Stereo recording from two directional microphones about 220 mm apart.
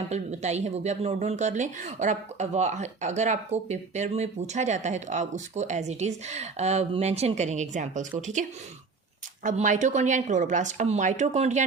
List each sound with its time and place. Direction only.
0.1 s speech: 30° right (ahead or behind)
9.4 s speech: 35° right (ahead or behind)